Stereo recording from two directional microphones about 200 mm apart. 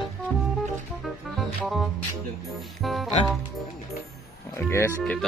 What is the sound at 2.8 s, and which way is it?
Music, centre (ahead or behind).